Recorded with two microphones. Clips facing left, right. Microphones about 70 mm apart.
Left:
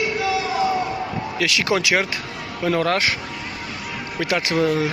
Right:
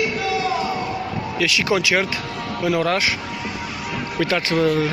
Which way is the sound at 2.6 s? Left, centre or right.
Left.